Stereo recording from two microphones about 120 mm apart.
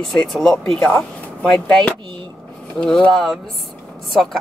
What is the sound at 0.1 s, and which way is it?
Speech, centre (ahead or behind).